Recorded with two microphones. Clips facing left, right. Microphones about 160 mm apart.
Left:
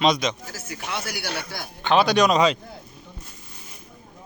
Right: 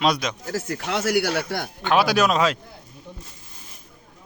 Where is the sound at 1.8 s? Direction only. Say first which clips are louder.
Left 1 dB; 5° right (ahead or behind).